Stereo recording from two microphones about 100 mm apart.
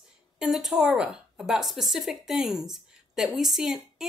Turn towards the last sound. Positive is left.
turn(degrees=-5)  # may be behind; listen again after turning